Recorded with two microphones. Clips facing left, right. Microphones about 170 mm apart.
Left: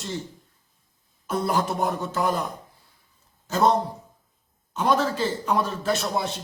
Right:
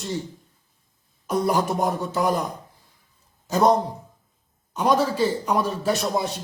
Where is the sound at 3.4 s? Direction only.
15° right (ahead or behind).